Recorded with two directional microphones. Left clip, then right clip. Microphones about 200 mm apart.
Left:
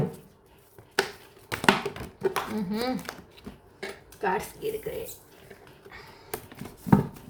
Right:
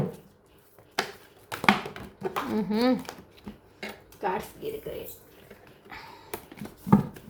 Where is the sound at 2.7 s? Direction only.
50° right (ahead or behind).